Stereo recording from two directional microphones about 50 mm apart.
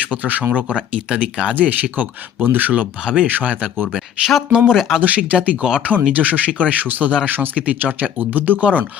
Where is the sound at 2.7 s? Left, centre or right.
Right.